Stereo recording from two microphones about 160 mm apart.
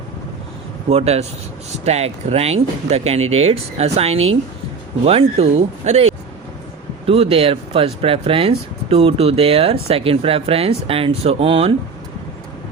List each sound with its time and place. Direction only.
0.9 s speech: 40° right (ahead or behind)